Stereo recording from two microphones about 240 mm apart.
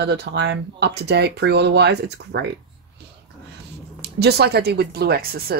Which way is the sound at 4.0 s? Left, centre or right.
Right.